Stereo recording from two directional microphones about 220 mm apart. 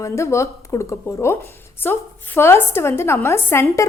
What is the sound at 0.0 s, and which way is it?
A woman's voice, 15° left (ahead or behind).